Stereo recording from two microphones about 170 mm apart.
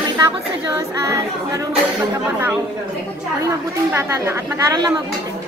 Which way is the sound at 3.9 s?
15° right (ahead or behind).